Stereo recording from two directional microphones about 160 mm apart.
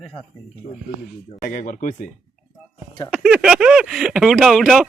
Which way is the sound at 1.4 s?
55° left (ahead or behind).